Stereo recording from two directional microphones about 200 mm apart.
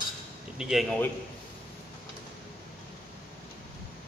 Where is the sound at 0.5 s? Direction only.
Centre (ahead or behind).